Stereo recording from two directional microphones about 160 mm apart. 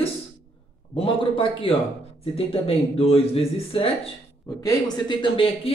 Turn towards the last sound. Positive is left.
turn(degrees=30)  # may be behind; listen again after turning